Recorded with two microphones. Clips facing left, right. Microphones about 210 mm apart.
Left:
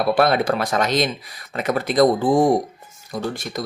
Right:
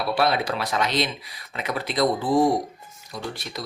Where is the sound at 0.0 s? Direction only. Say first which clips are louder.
Left 5 dB; 50° left (ahead or behind).